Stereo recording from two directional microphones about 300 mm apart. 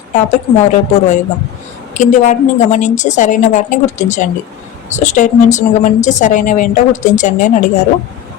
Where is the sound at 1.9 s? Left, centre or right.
Left.